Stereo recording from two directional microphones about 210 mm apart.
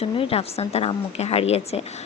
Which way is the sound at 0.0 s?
25° left (ahead or behind).